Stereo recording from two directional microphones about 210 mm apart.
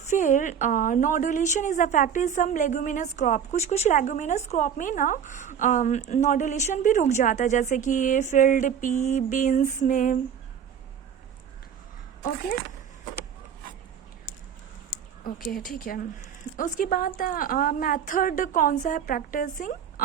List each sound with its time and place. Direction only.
0.1 s a woman's voice: 35° left (ahead or behind)
15.2 s a woman's voice: 40° left (ahead or behind)